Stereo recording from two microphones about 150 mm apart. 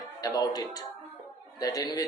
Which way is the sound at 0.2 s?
25° left (ahead or behind).